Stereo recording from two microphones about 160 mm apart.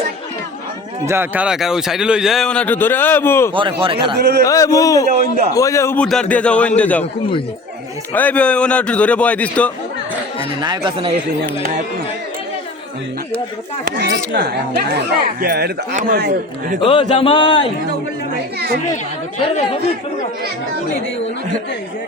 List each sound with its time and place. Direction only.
1.0 s a man's voice: 15° right (ahead or behind); by 3.5 s 15° left (ahead or behind)
3.5 s a man's voice: 35° right (ahead or behind)
4.4 s a man's voice: 20° left (ahead or behind)
5.0 s a man's voice: 45° right (ahead or behind)
5.5 s a man's voice: 20° left (ahead or behind)
6.0 s a man's voice: 5° left (ahead or behind)
7.0 s speech: 35° left (ahead or behind)
8.1 s a man's voice: 10° left (ahead or behind)
10.6 s speech: 30° right (ahead or behind)
13.8 s speech: 90° right
14.3 s speech: 75° right (ahead or behind)
15.9 s a man's voice: 55° right (ahead or behind)
16.8 s speech: 35° left (ahead or behind)